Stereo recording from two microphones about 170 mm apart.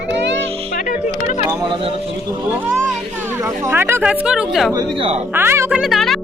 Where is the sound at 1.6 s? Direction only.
30° right (ahead or behind).